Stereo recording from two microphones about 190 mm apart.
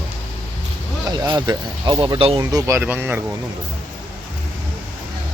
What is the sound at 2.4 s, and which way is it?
Speech, 15° right (ahead or behind).